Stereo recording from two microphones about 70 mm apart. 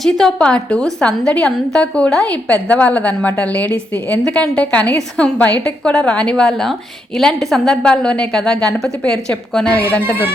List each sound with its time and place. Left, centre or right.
0.0 s a woman's voice: centre